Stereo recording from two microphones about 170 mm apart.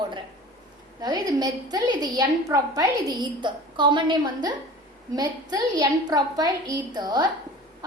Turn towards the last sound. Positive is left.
turn(degrees=-25)  # may be behind; listen again after turning